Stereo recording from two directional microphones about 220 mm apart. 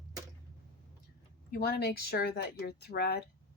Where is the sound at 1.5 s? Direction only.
45° left (ahead or behind).